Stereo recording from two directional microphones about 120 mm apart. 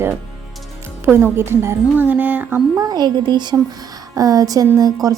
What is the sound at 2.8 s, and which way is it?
A woman's voice, 35° right (ahead or behind).